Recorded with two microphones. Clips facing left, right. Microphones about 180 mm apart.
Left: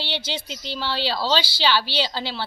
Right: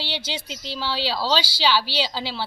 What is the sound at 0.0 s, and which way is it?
A woman's voice, 10° right (ahead or behind).